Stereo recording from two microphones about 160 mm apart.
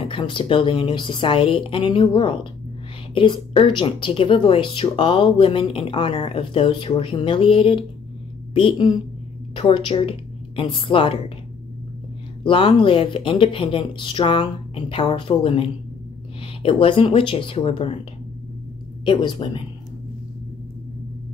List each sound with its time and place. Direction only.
0.0 s a woman's voice: 35° left (ahead or behind)
12.4 s speech: 30° left (ahead or behind)
16.6 s speech: 35° left (ahead or behind)
19.0 s speech: 30° left (ahead or behind)